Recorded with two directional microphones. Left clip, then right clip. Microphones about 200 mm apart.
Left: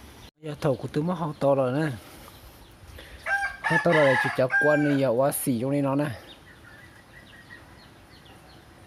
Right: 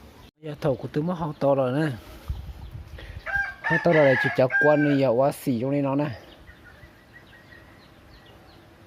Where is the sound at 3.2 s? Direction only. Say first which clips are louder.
Even; 55° left (ahead or behind).